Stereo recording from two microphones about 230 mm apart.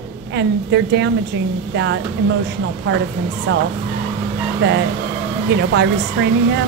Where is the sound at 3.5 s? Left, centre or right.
Right.